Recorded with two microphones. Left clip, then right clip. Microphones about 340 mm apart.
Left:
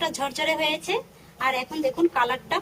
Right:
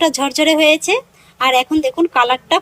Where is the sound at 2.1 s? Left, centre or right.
Centre.